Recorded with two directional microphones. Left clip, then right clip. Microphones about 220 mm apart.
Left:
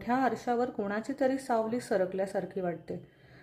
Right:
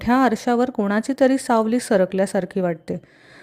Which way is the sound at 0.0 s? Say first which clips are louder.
Right 11 dB; 40° right (ahead or behind).